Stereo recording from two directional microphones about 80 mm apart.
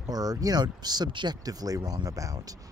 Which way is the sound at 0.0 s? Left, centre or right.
Right.